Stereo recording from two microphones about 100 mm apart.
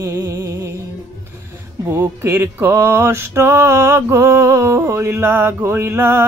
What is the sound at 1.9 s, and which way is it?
Mantra, 25° right (ahead or behind).